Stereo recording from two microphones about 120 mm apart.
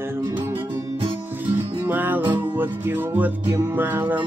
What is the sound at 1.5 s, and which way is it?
Music, 15° right (ahead or behind).